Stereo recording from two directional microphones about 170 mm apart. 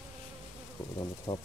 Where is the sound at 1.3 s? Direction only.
25° left (ahead or behind).